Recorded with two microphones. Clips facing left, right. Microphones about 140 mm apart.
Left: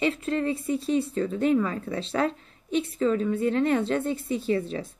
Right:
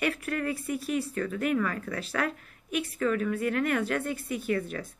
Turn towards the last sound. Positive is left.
turn(degrees=25)  # may be behind; listen again after turning